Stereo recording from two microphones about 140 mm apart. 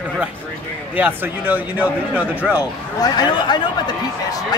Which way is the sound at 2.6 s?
30° left (ahead or behind).